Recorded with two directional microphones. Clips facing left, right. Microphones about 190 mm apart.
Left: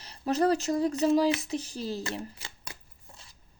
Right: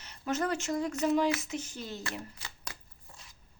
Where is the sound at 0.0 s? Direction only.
35° left (ahead or behind).